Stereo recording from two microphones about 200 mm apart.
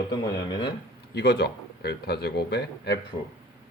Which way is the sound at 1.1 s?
55° left (ahead or behind).